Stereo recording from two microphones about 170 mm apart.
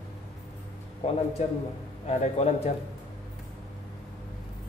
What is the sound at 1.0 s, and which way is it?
A man's voice, 35° left (ahead or behind).